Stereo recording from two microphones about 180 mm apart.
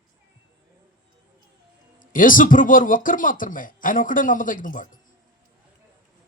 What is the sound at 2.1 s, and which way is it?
A man's voice, 50° left (ahead or behind).